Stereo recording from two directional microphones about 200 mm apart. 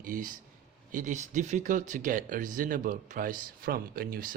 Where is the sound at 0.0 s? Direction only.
40° right (ahead or behind).